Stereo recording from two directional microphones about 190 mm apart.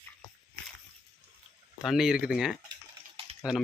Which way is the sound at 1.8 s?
5° right (ahead or behind).